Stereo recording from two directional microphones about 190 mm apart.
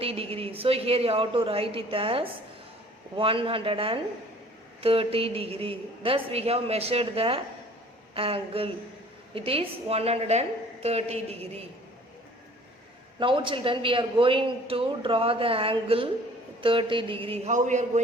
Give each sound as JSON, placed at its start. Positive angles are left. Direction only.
{"t": 0.0, "sound": "a man's voice", "side_deg": -30}
{"t": 13.1, "sound": "a man's voice", "side_deg": -25}